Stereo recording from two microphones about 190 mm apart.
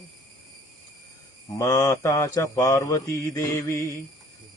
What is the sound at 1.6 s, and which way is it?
Mantra, 20° left (ahead or behind).